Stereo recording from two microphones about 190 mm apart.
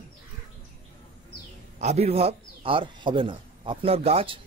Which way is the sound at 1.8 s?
35° right (ahead or behind).